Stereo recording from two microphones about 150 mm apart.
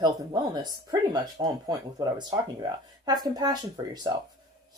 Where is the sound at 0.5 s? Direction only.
25° right (ahead or behind).